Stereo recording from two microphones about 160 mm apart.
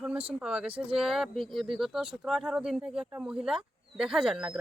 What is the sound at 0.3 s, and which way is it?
Speech, 5° right (ahead or behind).